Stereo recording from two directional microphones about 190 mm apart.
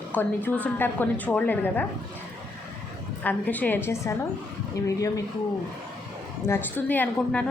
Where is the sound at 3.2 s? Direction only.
10° left (ahead or behind).